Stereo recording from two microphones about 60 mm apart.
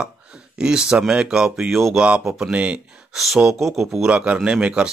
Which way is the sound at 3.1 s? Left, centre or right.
Centre.